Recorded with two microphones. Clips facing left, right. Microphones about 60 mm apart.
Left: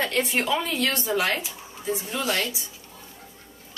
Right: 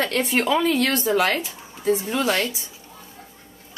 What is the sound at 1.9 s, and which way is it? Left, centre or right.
Speech, right.